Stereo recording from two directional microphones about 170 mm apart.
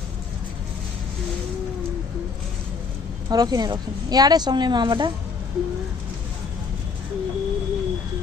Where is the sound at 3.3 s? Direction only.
20° right (ahead or behind).